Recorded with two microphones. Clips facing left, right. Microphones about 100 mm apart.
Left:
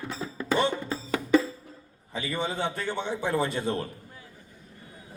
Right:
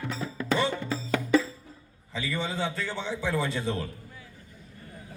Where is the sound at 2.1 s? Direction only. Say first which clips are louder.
Left 1 dB; 50° left (ahead or behind).